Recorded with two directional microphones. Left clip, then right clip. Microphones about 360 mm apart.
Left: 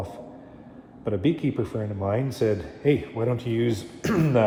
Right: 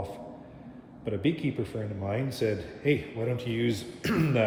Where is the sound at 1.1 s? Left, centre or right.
Centre.